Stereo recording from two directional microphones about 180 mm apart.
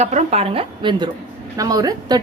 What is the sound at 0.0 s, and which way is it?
A woman's voice, 35° right (ahead or behind).